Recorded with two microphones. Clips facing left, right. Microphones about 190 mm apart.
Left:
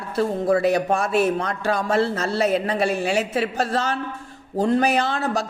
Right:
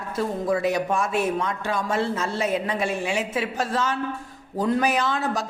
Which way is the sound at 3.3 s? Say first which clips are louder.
Left 3 dB; 35° left (ahead or behind).